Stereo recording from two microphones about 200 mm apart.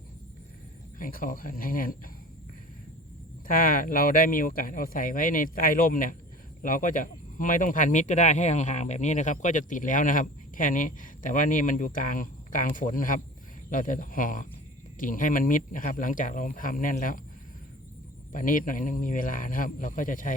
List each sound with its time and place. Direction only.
0.9 s speech: 45° left (ahead or behind)
3.4 s speech: 45° left (ahead or behind)
18.3 s speech: 45° left (ahead or behind)